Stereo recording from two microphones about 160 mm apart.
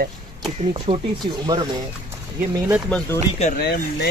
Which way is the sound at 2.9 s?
5° left (ahead or behind).